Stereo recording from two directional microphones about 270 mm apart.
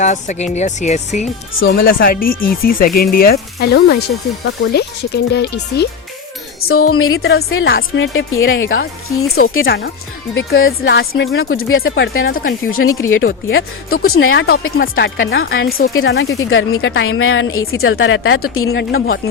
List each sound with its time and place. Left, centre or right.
0.0 s speech: left
6.7 s speech: left
9.6 s speech: left
12.7 s speech: left